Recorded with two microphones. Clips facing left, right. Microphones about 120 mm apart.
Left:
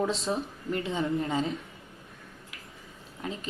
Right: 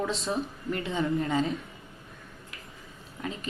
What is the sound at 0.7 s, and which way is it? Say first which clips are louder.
Speech: even; 25° left (ahead or behind).